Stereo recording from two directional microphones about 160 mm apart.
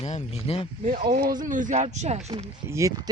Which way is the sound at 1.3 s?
55° right (ahead or behind).